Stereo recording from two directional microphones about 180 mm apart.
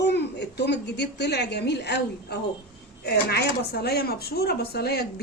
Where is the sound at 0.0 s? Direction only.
70° left (ahead or behind).